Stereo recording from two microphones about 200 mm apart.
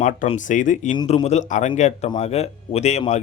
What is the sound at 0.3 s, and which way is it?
Speech, 40° left (ahead or behind).